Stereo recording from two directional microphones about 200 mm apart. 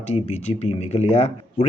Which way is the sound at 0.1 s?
35° left (ahead or behind).